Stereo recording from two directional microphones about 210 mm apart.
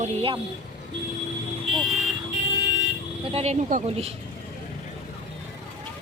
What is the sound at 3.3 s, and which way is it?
Speech, 30° right (ahead or behind).